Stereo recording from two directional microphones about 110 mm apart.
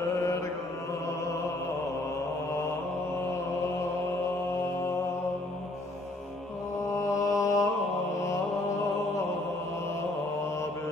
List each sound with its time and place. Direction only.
6.9 s music: 30° left (ahead or behind)